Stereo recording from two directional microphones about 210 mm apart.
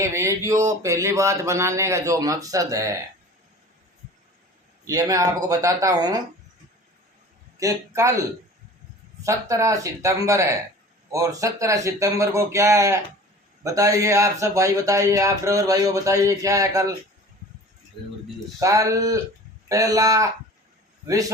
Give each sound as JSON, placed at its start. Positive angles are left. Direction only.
{"t": 0.0, "sound": "speech", "side_deg": -15}
{"t": 4.9, "sound": "speech", "side_deg": -15}
{"t": 7.6, "sound": "speech", "side_deg": -15}
{"t": 9.2, "sound": "speech", "side_deg": -15}
{"t": 18.6, "sound": "speech", "side_deg": -15}